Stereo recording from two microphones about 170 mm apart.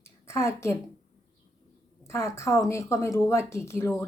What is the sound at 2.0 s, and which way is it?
Speech, 15° left (ahead or behind).